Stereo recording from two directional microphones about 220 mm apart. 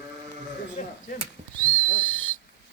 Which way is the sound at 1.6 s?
10° left (ahead or behind).